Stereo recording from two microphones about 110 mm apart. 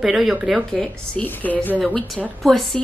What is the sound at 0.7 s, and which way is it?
Speech, 5° left (ahead or behind).